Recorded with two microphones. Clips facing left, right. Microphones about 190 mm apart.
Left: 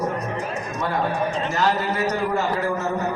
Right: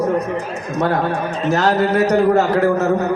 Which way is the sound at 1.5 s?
70° right (ahead or behind).